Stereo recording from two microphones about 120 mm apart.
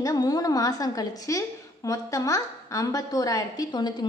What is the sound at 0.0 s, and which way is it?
A woman's voice, 30° left (ahead or behind).